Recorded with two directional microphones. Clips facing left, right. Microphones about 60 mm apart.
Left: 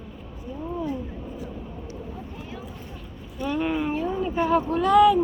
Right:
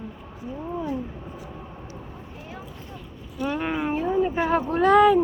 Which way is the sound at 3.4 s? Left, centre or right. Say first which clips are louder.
Left 1 dB; right.